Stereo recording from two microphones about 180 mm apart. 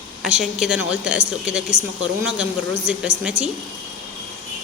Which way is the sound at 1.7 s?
90° right.